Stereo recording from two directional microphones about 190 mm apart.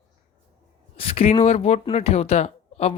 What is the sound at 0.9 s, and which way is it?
Speech, 30° left (ahead or behind).